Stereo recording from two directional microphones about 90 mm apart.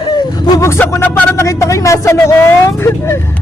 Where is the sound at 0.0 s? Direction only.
50° left (ahead or behind).